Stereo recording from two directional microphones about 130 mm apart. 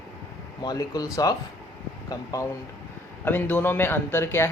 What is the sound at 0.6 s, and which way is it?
A man's voice, 30° left (ahead or behind).